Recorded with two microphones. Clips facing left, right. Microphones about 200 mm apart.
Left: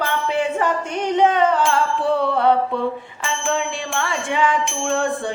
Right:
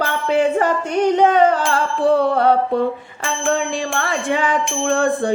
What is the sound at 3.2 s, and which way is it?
Bicycle bell, 45° right (ahead or behind).